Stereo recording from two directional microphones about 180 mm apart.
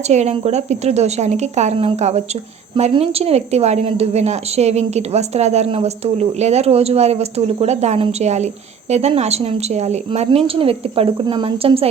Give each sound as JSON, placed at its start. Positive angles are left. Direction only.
{"t": 0.1, "sound": "a woman's voice", "side_deg": -40}